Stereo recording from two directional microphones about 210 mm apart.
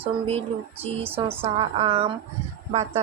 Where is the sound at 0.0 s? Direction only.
30° right (ahead or behind).